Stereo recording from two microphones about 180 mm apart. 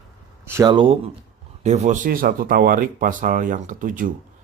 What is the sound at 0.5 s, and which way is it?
Speech, 20° right (ahead or behind).